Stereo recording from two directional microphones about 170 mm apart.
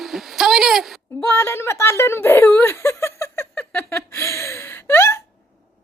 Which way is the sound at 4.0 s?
15° left (ahead or behind).